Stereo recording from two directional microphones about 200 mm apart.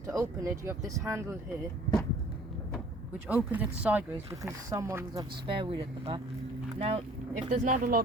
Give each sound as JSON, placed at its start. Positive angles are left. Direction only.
{"t": 0.1, "sound": "speech", "side_deg": -15}
{"t": 3.2, "sound": "speech", "side_deg": -10}